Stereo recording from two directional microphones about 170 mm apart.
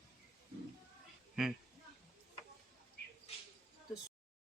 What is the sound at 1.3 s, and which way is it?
Speech, centre (ahead or behind).